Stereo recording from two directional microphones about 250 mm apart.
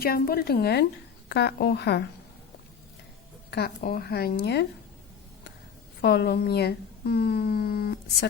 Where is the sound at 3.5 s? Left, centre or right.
Left.